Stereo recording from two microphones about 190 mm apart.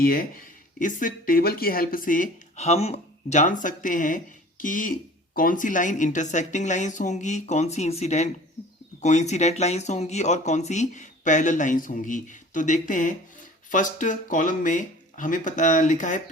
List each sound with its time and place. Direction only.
0.0 s speech: 50° left (ahead or behind)